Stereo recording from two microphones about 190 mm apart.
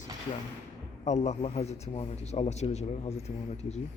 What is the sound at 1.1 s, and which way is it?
A man's voice, 35° left (ahead or behind).